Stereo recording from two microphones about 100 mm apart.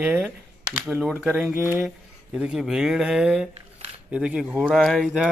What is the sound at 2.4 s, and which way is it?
Speech, 5° right (ahead or behind).